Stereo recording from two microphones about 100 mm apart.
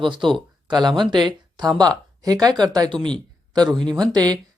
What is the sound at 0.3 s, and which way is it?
Speech, 50° right (ahead or behind).